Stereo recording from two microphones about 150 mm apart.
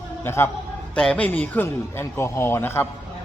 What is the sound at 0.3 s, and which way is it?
A man's voice, 15° left (ahead or behind).